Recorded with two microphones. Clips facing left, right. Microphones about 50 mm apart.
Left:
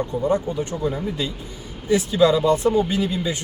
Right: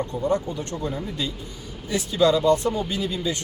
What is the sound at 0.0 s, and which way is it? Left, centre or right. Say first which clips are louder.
A man's voice: left 3 dB; centre.